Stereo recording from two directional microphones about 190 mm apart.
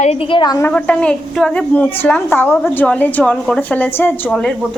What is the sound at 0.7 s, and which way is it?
A woman's voice, 5° left (ahead or behind).